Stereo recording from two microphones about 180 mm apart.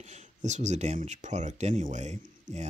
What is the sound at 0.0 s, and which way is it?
Speech, 40° right (ahead or behind).